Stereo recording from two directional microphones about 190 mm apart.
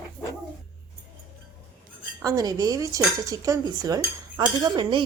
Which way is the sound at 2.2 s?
20° right (ahead or behind).